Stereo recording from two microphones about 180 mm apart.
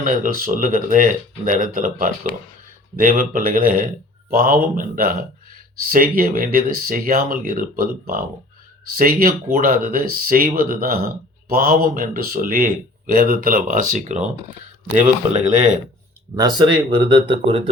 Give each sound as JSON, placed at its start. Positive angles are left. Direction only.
{"t": 0.0, "sound": "speech", "side_deg": -50}
{"t": 16.3, "sound": "speech", "side_deg": -20}